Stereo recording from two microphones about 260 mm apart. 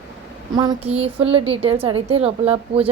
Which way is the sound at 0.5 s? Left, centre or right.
Centre.